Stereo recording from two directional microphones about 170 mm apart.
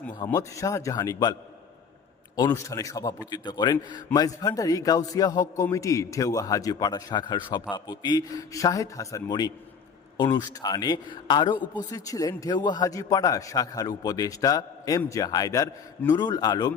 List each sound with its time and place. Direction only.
0.3 s a man's voice: 20° left (ahead or behind)
2.5 s a man's voice: 20° left (ahead or behind)